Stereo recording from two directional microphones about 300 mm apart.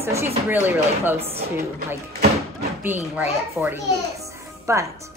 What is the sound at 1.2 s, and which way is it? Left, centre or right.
Speech, centre.